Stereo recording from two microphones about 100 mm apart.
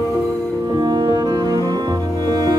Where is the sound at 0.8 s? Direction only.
45° right (ahead or behind).